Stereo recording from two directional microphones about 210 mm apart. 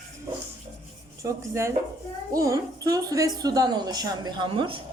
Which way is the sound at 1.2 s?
15° right (ahead or behind).